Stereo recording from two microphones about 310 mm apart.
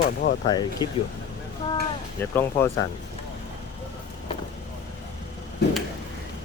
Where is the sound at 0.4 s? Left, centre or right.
Centre.